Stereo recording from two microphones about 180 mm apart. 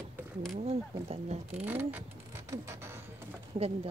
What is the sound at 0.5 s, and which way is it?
Speech, 35° right (ahead or behind).